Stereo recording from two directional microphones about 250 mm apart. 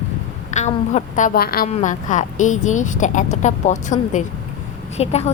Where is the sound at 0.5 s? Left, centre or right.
Left.